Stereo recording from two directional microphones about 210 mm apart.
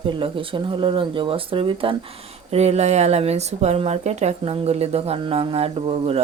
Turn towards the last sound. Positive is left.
turn(degrees=-25)  # may be behind; listen again after turning